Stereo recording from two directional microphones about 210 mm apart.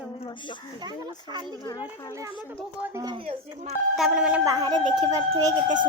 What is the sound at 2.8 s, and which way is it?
Speech, 15° right (ahead or behind).